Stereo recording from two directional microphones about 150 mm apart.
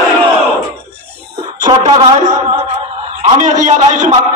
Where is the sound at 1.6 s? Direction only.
30° right (ahead or behind).